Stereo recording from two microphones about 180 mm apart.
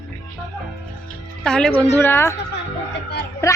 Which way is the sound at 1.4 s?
5° left (ahead or behind).